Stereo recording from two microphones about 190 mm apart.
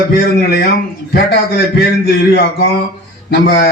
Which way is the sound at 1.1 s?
55° left (ahead or behind).